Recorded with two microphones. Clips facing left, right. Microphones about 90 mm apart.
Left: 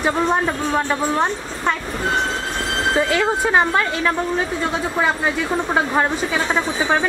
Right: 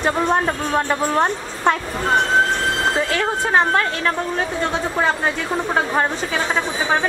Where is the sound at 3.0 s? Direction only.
10° left (ahead or behind).